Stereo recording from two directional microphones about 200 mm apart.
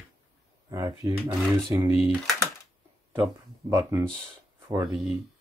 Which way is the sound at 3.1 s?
15° right (ahead or behind).